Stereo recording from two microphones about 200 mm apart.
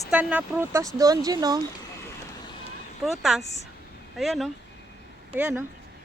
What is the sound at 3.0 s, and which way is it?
Speech, centre (ahead or behind).